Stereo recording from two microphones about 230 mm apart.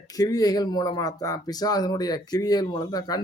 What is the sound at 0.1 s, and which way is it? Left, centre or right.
Speech, centre.